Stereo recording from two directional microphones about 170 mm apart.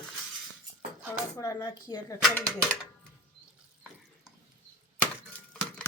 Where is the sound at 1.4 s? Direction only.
20° left (ahead or behind).